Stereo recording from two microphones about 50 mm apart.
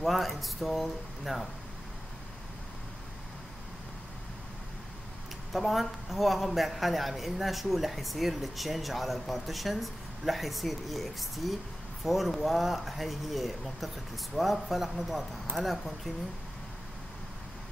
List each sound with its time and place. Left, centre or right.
0.0 s a man's voice: centre
5.5 s a man's voice: centre